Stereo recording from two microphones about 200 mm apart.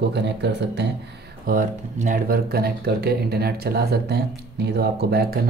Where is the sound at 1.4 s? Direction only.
40° right (ahead or behind).